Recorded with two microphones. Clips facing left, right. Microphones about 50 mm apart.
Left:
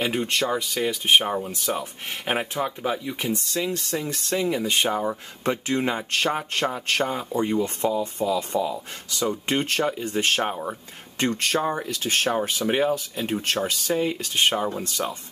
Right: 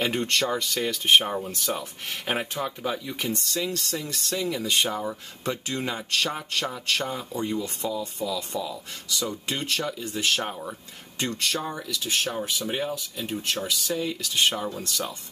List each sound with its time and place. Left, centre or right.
0.0 s speech: centre
11.1 s speech: left